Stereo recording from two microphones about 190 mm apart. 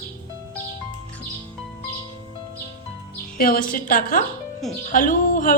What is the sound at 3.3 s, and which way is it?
A woman's voice, 50° left (ahead or behind).